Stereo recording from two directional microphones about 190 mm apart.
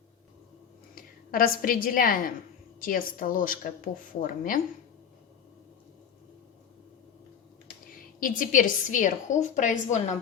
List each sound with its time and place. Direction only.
0.9 s a woman's voice: 50° left (ahead or behind)
7.9 s a woman's voice: 45° left (ahead or behind)